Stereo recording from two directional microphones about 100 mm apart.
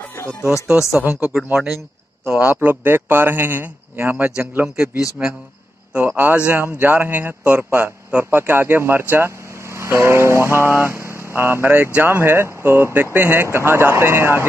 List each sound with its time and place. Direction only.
0.2 s music: 25° left (ahead or behind)
0.9 s a man's voice: 15° right (ahead or behind)
4.4 s a man's voice: 10° right (ahead or behind); by 14.4 s 25° right (ahead or behind)